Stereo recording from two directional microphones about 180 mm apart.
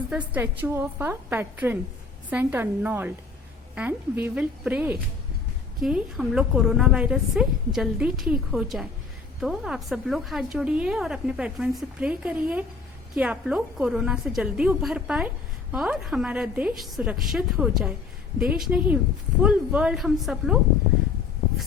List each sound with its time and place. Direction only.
0.1 s a woman's voice: 10° right (ahead or behind)
4.2 s a woman's voice: 5° right (ahead or behind)